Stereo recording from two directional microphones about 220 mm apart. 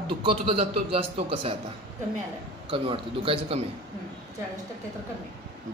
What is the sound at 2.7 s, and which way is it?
Speech, 25° right (ahead or behind).